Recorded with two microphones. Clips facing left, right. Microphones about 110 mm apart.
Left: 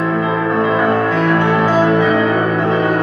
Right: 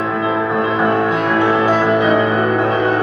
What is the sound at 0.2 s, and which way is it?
Music, 15° right (ahead or behind).